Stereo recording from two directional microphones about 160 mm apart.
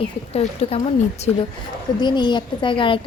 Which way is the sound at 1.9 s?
30° left (ahead or behind).